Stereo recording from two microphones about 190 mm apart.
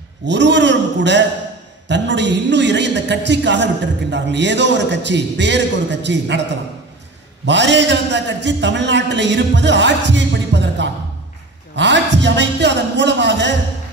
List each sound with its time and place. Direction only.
0.3 s a man's voice: 70° right (ahead or behind)
7.4 s speech: 70° right (ahead or behind)